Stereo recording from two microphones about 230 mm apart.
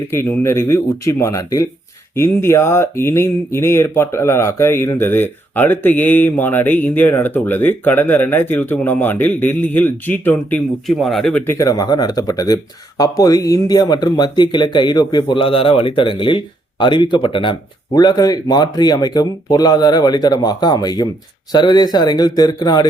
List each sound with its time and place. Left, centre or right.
0.1 s speech: centre